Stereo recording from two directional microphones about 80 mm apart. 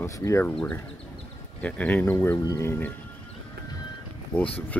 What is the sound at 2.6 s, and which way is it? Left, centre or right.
Speech, left.